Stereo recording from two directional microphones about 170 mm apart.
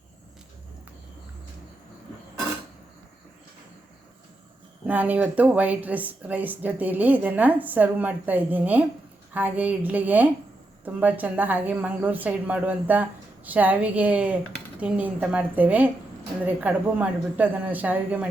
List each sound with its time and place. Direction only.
4.9 s speech: 10° right (ahead or behind)